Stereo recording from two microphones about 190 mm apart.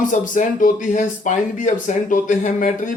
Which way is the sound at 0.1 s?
40° left (ahead or behind).